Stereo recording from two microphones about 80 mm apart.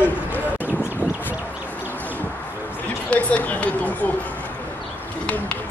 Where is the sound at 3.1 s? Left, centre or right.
Centre.